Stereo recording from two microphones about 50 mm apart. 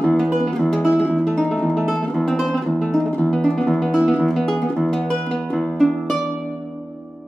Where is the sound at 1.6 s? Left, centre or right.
Centre.